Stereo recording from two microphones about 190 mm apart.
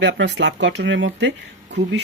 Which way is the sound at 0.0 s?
75° right (ahead or behind).